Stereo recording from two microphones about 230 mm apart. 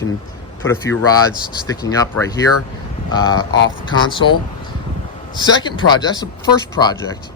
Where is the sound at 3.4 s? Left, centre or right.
Left.